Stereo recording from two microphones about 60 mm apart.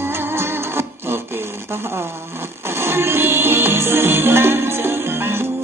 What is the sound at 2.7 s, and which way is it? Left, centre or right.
Music, right.